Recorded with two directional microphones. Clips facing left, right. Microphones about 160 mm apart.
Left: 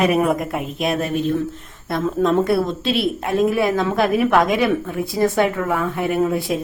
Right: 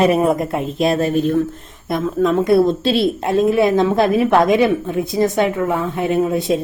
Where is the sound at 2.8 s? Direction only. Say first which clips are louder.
Right 4 dB; 30° right (ahead or behind).